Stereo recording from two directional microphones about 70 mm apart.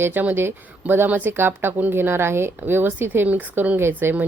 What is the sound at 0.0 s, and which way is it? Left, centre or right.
Speech, right.